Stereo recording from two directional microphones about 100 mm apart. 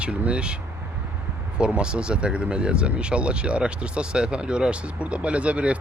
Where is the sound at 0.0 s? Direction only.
10° right (ahead or behind).